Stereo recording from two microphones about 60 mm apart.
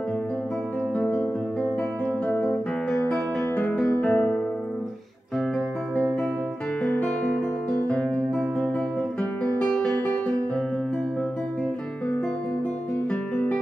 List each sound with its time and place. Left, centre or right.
0.9 s music: left
4.0 s music: left
6.8 s guitar: left
7.9 s music: centre
13.1 s guitar: centre